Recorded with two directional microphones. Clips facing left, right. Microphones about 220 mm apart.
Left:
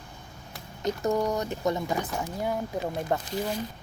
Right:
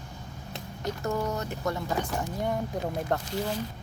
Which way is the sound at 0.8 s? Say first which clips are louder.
Left 4 dB; 15° left (ahead or behind).